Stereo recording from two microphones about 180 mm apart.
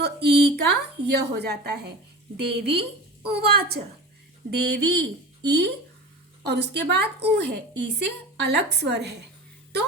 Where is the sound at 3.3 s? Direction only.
60° right (ahead or behind).